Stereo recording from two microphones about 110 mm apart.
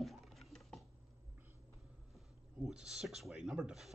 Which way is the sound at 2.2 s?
5° right (ahead or behind).